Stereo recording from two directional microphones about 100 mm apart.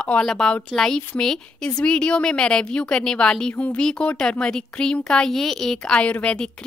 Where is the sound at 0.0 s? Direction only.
10° left (ahead or behind).